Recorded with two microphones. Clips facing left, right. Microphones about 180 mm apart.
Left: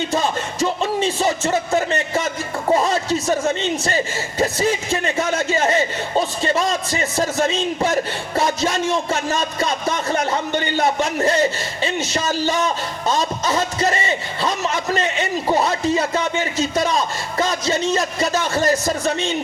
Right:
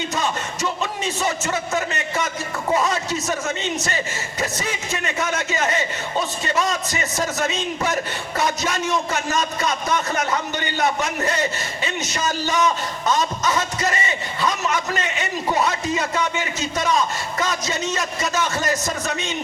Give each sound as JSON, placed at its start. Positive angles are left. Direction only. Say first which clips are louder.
{"t": 0.1, "sound": "speech", "louder": "left 4 dB", "side_deg": 35}